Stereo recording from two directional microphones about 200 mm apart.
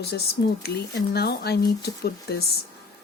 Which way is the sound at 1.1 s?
55° left (ahead or behind).